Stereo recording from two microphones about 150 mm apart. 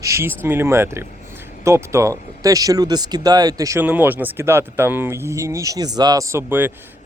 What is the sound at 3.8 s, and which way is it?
Speech, 10° right (ahead or behind).